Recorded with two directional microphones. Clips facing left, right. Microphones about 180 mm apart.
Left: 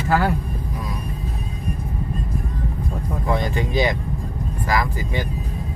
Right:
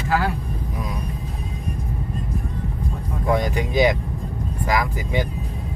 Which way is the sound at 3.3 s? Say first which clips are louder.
Right 2 dB; 15° right (ahead or behind).